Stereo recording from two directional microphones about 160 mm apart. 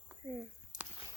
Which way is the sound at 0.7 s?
25° right (ahead or behind).